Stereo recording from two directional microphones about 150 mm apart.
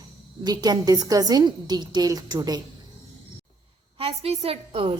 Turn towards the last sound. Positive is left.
turn(degrees=-40)  # may be behind; listen again after turning